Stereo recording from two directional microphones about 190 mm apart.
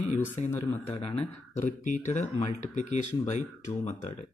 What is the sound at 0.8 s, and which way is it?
Speech, 30° left (ahead or behind).